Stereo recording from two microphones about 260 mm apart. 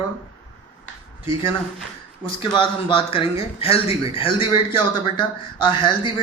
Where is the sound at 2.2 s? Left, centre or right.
Centre.